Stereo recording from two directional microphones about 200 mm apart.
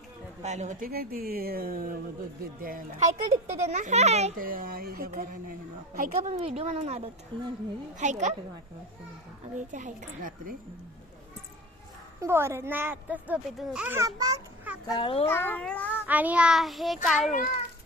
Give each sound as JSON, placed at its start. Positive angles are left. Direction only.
{"t": 0.4, "sound": "a woman's voice", "side_deg": -35}
{"t": 4.4, "sound": "a woman's voice", "side_deg": -45}
{"t": 7.9, "sound": "a woman's voice", "side_deg": -35}
{"t": 9.6, "sound": "a woman's voice", "side_deg": -40}
{"t": 12.2, "sound": "a child's voice", "side_deg": -15}
{"t": 14.8, "sound": "a child's voice", "side_deg": 25}
{"t": 15.3, "sound": "speech", "side_deg": 10}
{"t": 16.0, "sound": "a child's voice", "side_deg": -10}